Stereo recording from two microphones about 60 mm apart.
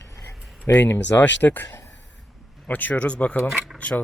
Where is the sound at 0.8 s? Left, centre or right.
Left.